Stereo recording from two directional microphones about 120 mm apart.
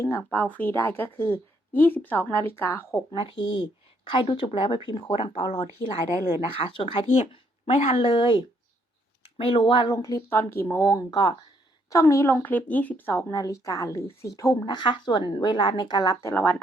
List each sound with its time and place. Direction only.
0.0 s a woman's voice: 20° left (ahead or behind)
3.2 s a woman's voice: 45° left (ahead or behind)
6.5 s speech: 45° left (ahead or behind)
7.7 s a woman's voice: 65° left (ahead or behind); by 10.0 s 40° left (ahead or behind)
10.0 s a woman's voice: 30° left (ahead or behind)
12.3 s a woman's voice: 15° left (ahead or behind)
13.3 s a woman's voice: 30° left (ahead or behind)
16.2 s a woman's voice: 15° left (ahead or behind)